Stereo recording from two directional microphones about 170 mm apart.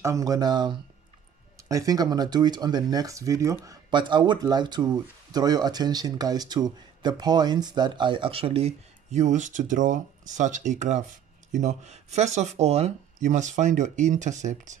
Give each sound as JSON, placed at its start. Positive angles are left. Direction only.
{"t": 0.0, "sound": "speech", "side_deg": -20}